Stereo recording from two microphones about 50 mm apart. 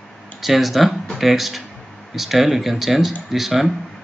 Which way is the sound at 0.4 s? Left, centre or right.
Centre.